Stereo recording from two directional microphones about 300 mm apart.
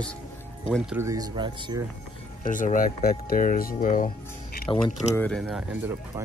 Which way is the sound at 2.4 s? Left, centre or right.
Left.